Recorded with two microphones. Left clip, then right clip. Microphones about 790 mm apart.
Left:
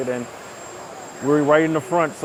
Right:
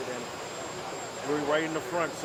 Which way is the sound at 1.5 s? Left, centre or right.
Left.